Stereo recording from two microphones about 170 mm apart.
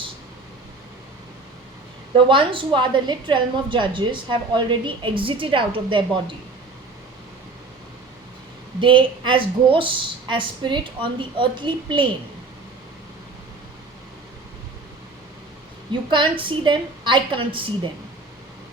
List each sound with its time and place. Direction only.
2.1 s a woman's voice: 30° right (ahead or behind)
8.8 s a woman's voice: 30° right (ahead or behind)
16.0 s a woman's voice: 30° right (ahead or behind)